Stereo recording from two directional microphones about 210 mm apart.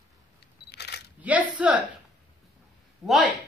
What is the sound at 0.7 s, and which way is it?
Single-lens reflex camera, 50° left (ahead or behind).